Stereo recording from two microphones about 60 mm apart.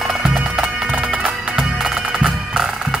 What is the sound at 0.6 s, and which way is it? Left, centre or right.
Music, right.